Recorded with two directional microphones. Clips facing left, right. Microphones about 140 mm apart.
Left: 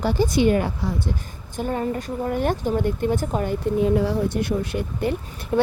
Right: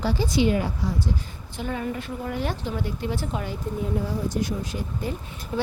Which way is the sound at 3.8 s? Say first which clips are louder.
Left 6 dB; 80° left.